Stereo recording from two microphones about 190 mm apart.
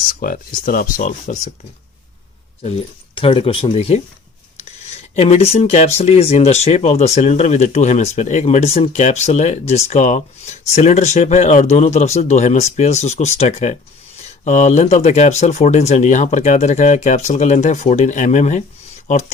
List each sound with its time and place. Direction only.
0.0 s speech: 50° left (ahead or behind)
3.2 s speech: 30° left (ahead or behind)